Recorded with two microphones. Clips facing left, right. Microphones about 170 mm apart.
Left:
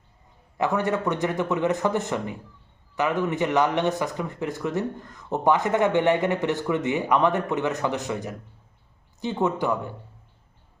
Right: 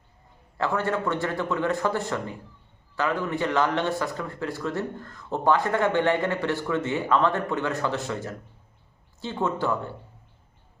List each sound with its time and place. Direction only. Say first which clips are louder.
0.5 s a man's voice: left 2 dB; 20° left (ahead or behind)